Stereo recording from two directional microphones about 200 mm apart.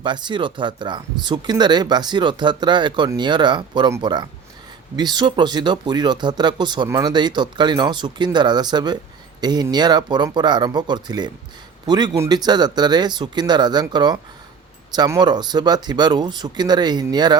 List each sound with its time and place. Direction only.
0.0 s speech: 25° right (ahead or behind)